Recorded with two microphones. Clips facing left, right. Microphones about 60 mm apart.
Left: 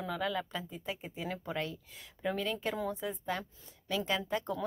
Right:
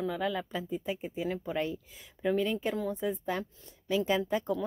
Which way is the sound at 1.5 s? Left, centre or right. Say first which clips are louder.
Right 4 dB; centre.